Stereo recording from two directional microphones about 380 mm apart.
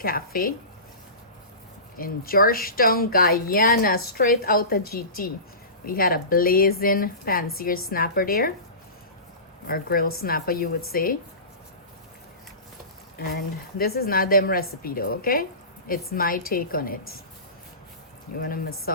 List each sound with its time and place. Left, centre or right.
0.0 s a woman's voice: left
2.0 s a woman's voice: left
9.6 s a woman's voice: left
13.1 s a woman's voice: left
18.3 s a woman's voice: left